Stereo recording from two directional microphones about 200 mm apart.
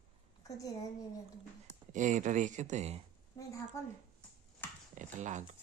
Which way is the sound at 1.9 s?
40° right (ahead or behind).